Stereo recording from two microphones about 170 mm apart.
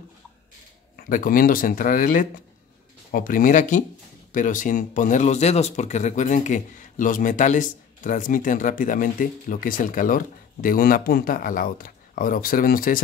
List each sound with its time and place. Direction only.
0.9 s speech: 55° left (ahead or behind)